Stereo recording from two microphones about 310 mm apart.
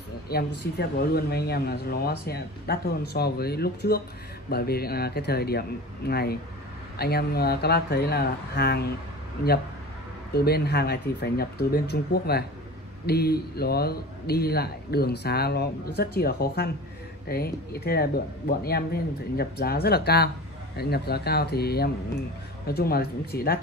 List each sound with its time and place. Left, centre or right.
0.3 s speech: left
10.3 s speech: left